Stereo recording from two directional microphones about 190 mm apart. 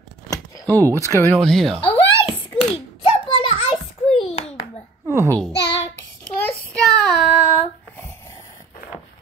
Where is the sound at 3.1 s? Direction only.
25° left (ahead or behind).